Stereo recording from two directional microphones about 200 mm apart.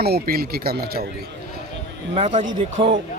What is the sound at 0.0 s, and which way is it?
Speech, 50° right (ahead or behind).